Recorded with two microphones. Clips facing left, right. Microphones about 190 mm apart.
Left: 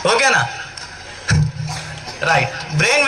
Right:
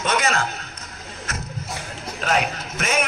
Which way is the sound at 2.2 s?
75° left (ahead or behind).